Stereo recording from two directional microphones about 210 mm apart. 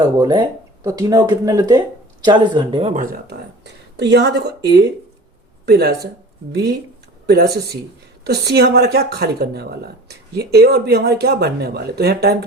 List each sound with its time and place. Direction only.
0.0 s speech: 20° right (ahead or behind)
2.9 s speech: 40° right (ahead or behind)